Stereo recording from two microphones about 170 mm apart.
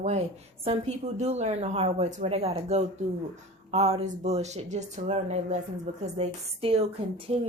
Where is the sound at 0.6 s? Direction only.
40° right (ahead or behind).